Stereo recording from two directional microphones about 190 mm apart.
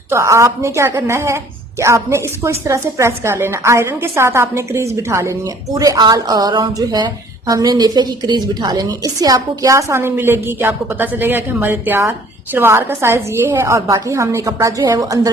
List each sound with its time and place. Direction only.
0.1 s a woman's voice: 15° right (ahead or behind)